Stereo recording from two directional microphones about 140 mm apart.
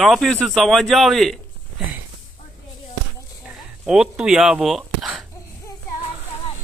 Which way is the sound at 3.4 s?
5° right (ahead or behind).